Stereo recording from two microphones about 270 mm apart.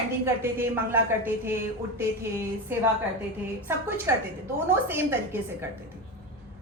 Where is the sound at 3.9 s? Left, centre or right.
Centre.